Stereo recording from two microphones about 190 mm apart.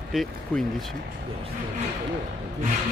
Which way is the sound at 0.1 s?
Centre (ahead or behind).